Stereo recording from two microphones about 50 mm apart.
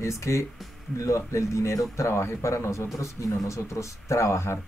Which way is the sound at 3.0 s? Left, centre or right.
Left.